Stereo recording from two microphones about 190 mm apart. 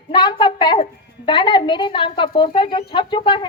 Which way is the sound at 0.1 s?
25° left (ahead or behind).